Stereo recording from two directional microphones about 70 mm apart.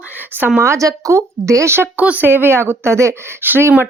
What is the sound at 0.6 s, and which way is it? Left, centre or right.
A woman's voice, right.